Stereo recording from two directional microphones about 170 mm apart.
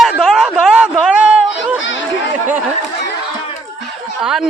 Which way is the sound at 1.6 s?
90° left.